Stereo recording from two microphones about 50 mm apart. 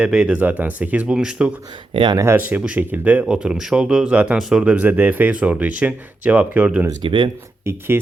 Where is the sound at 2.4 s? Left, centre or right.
Right.